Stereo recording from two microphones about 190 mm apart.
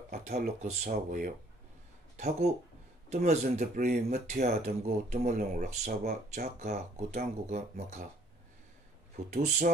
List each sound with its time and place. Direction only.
0.2 s speech: 35° right (ahead or behind)
3.2 s speech: 45° right (ahead or behind)
5.3 s speech: 50° right (ahead or behind)
5.7 s speech: 40° right (ahead or behind)
9.1 s speech: 35° right (ahead or behind)